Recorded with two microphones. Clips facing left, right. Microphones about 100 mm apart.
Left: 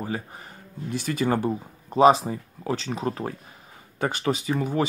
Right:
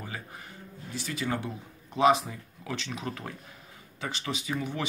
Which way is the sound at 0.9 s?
50° left (ahead or behind).